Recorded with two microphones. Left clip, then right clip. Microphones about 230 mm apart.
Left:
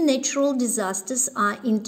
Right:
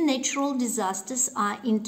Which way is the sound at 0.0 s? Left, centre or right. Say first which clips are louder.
Left 4 dB; centre.